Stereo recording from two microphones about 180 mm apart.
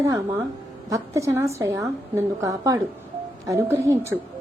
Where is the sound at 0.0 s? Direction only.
15° right (ahead or behind).